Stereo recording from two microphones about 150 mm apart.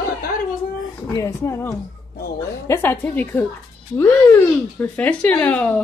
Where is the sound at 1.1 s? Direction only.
20° left (ahead or behind).